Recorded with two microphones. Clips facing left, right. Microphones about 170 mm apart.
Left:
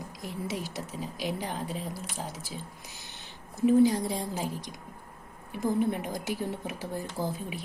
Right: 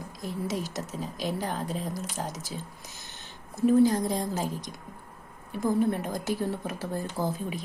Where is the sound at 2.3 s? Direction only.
40° right (ahead or behind).